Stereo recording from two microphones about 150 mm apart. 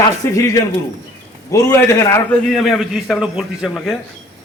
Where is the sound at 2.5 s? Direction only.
Centre (ahead or behind).